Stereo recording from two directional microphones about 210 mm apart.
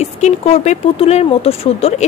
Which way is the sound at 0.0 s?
30° left (ahead or behind).